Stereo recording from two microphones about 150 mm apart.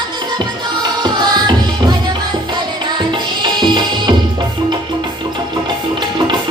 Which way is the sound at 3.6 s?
30° right (ahead or behind).